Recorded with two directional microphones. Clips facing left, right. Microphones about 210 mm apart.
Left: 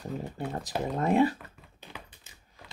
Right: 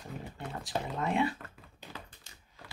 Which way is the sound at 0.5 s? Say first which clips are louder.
Left 3 dB; 40° left (ahead or behind).